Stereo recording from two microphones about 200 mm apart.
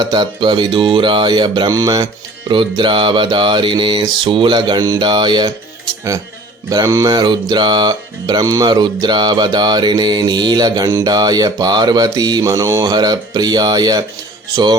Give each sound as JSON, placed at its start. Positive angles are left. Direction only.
{"t": 0.0, "sound": "music", "side_deg": -20}
{"t": 6.7, "sound": "music", "side_deg": -15}